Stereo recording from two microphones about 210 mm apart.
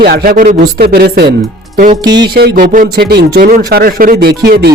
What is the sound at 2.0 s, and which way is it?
Music, 20° right (ahead or behind).